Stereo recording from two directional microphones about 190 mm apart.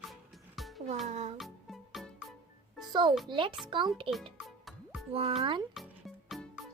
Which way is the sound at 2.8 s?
25° right (ahead or behind).